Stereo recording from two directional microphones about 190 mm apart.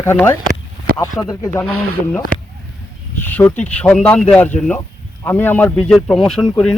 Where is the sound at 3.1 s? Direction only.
10° left (ahead or behind).